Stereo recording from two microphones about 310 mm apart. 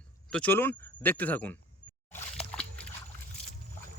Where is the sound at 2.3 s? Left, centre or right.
Centre.